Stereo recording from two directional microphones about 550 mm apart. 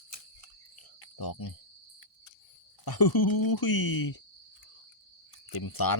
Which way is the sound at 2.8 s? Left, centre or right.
Left.